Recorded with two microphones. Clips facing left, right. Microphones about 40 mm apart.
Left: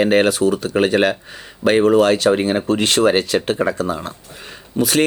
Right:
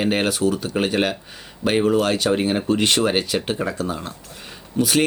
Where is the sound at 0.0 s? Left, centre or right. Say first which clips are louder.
Left 6 dB; centre.